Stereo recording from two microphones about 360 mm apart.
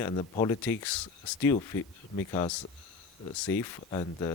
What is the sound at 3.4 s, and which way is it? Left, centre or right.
Speech, centre.